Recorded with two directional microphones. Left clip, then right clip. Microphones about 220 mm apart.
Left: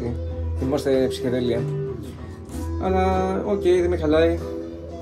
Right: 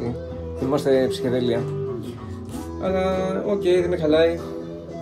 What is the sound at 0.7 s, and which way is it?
Speech, 20° right (ahead or behind).